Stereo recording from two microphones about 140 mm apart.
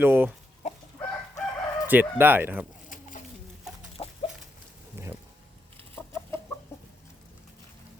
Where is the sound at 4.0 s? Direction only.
40° left (ahead or behind).